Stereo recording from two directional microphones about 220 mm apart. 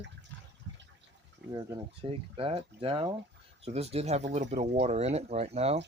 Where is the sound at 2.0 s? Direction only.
25° right (ahead or behind).